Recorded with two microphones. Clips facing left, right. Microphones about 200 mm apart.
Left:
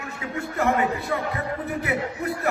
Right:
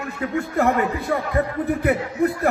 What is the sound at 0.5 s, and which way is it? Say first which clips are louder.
Speech: right 2 dB; 50° right (ahead or behind).